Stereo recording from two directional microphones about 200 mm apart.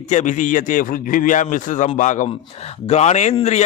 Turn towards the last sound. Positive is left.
turn(degrees=35)  # may be behind; listen again after turning